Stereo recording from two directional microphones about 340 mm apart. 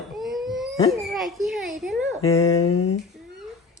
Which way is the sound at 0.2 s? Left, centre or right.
Centre.